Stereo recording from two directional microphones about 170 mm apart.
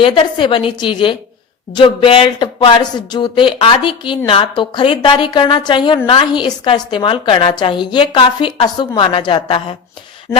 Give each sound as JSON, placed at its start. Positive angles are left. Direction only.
{"t": 0.0, "sound": "a woman's voice", "side_deg": 30}